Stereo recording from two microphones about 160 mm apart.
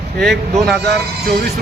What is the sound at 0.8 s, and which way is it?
Speech, 90° right.